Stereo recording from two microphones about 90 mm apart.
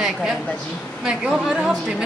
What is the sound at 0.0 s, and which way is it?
A woman's voice, 5° right (ahead or behind).